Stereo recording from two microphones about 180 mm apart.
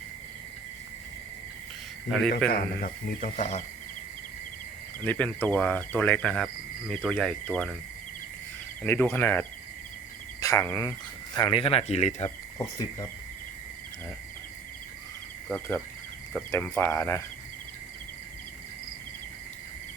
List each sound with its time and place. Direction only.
2.0 s cricket: centre (ahead or behind)
2.5 s speech: 50° left (ahead or behind)
5.0 s cricket: 10° left (ahead or behind)
8.8 s speech: 10° left (ahead or behind); by 12.3 s 40° left (ahead or behind)
15.4 s speech: 10° left (ahead or behind)